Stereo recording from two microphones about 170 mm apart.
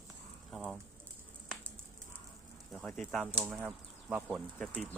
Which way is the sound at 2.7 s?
Centre (ahead or behind).